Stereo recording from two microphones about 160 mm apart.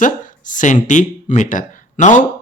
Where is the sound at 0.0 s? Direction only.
55° left (ahead or behind).